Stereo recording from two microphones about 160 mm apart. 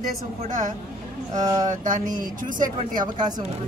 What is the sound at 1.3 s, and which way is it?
Speech, 25° right (ahead or behind).